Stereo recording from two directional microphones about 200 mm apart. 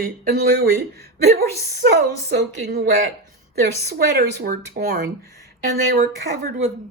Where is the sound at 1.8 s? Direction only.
55° right (ahead or behind).